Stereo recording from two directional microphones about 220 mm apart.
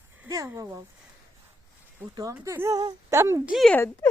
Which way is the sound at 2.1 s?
15° right (ahead or behind).